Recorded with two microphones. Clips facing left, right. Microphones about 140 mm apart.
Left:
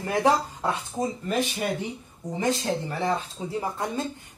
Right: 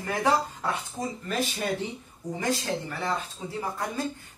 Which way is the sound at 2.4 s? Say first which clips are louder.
Left 3 dB; 20° left (ahead or behind).